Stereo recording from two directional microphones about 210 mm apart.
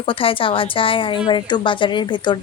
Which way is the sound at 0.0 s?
25° left (ahead or behind).